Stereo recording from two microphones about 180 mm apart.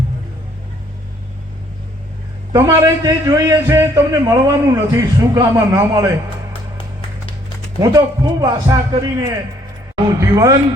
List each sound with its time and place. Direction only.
2.5 s a man's voice: 20° right (ahead or behind)
7.8 s a man's voice: 20° right (ahead or behind)